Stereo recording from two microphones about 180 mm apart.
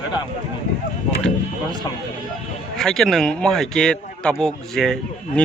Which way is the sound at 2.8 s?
Centre (ahead or behind).